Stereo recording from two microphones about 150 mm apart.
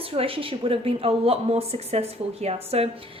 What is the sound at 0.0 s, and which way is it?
A woman's voice, 40° right (ahead or behind).